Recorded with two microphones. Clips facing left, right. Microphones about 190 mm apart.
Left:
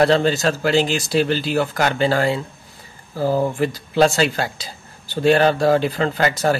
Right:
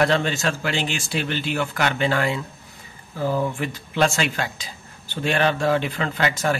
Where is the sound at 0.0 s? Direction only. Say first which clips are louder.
Left 5 dB; 35° left (ahead or behind).